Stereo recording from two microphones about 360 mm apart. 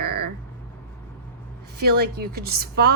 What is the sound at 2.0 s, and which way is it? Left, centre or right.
Speech, right.